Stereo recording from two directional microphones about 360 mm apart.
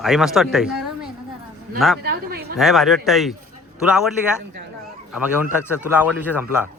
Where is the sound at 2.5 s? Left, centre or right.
Centre.